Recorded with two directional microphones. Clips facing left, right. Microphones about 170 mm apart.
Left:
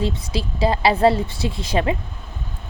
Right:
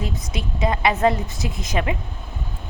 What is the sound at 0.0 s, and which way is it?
A woman's voice, 30° left (ahead or behind).